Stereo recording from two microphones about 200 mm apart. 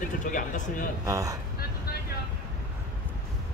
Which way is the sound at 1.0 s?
15° right (ahead or behind).